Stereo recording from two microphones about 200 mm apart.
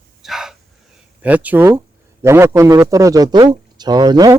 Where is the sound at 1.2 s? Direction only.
10° right (ahead or behind).